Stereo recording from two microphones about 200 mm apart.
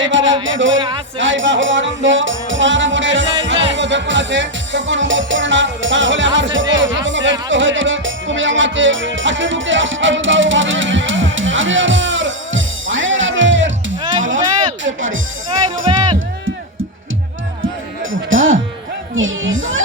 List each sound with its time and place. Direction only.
0.0 s music: 70° right (ahead or behind)
14.8 s music: 75° right (ahead or behind)
15.9 s music: 25° right (ahead or behind)
18.1 s music: 75° right (ahead or behind)